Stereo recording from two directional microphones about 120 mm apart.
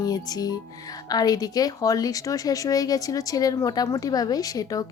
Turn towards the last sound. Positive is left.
turn(degrees=30)  # may be behind; listen again after turning